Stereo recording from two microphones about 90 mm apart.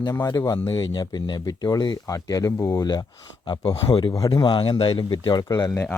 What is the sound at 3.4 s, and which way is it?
Speech, 60° left (ahead or behind).